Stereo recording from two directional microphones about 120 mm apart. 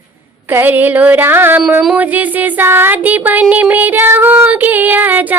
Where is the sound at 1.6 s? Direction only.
5° right (ahead or behind).